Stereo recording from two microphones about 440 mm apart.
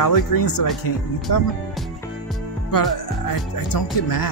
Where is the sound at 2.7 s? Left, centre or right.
Left.